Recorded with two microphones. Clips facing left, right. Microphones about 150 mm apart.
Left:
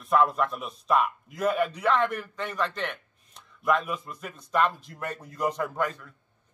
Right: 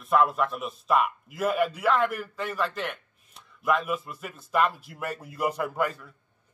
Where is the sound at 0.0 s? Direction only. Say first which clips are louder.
Even; centre (ahead or behind).